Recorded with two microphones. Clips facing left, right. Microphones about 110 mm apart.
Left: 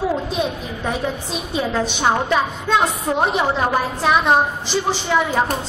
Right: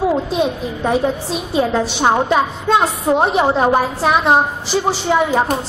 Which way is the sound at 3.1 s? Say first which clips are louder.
Right 4 dB; 35° right (ahead or behind).